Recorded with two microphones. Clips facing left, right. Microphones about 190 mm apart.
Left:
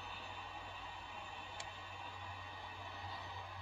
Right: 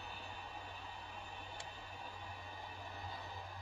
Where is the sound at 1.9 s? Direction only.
40° right (ahead or behind).